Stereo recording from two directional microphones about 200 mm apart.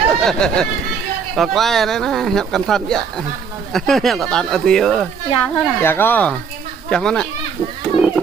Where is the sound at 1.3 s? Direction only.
Centre (ahead or behind).